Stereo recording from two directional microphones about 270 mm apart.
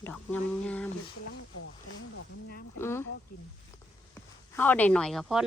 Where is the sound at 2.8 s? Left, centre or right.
Centre.